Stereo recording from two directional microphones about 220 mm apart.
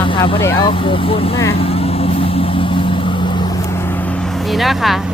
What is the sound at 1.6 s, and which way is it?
Vehicle, 25° left (ahead or behind).